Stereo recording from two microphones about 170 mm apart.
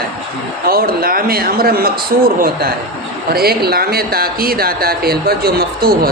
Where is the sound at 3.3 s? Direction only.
65° right (ahead or behind).